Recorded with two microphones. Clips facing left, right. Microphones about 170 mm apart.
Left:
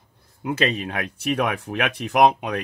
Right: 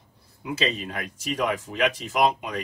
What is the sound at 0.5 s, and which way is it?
Speech, 60° left (ahead or behind).